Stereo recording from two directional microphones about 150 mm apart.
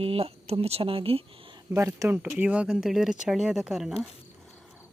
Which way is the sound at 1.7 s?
15° right (ahead or behind).